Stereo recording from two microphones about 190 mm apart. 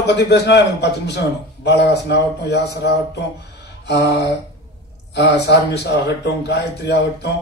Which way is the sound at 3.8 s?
60° left (ahead or behind).